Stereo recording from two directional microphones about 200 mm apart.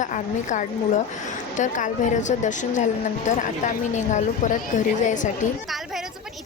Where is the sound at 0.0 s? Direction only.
40° left (ahead or behind).